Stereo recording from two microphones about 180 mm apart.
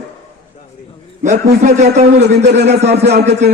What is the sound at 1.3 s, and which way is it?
Speech, 40° right (ahead or behind).